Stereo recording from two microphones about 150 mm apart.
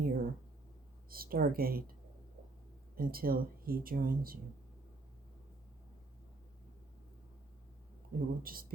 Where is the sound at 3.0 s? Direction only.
75° right (ahead or behind).